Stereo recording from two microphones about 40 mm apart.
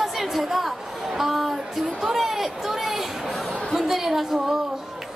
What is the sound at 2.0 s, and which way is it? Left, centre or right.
Chatter, centre.